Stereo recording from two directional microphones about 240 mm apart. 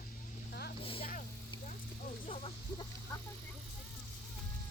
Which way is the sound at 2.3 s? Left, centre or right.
Left.